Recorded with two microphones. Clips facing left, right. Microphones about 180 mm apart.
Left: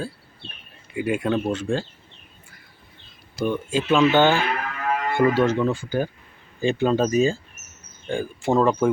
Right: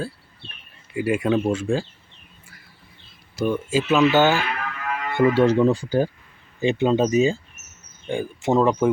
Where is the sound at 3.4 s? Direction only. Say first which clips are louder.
Right 2 dB; 5° right (ahead or behind).